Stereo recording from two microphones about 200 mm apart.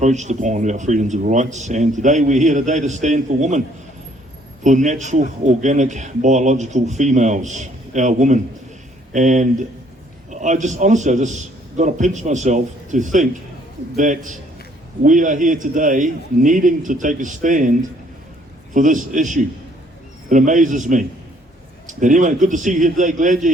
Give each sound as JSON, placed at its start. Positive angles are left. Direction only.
{"t": 0.0, "sound": "a man's voice", "side_deg": -35}
{"t": 4.6, "sound": "a man's voice", "side_deg": -35}